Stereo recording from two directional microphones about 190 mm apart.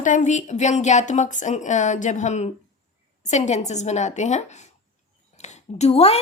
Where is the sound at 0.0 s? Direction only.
40° left (ahead or behind).